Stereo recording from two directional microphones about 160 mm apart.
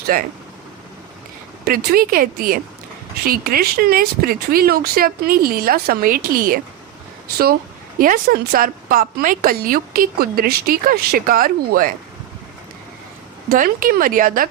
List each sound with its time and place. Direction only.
0.1 s a woman's voice: 65° right (ahead or behind)
1.6 s a woman's voice: 65° right (ahead or behind)
7.9 s a woman's voice: 60° right (ahead or behind)
13.5 s a woman's voice: 60° right (ahead or behind)